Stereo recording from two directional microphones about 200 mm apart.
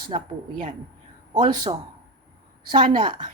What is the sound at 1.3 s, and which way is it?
Speech, 25° right (ahead or behind).